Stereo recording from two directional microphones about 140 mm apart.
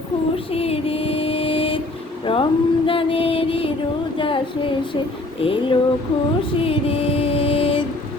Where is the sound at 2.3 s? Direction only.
40° left (ahead or behind).